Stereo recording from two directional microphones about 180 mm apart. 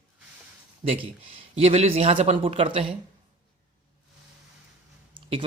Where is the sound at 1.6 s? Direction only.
35° right (ahead or behind).